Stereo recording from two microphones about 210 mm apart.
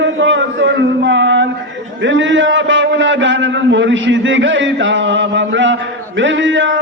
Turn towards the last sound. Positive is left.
turn(degrees=-60)  # may be behind; listen again after turning